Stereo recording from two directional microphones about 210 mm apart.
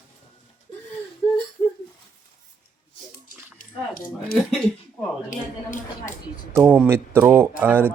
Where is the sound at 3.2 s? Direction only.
40° left (ahead or behind).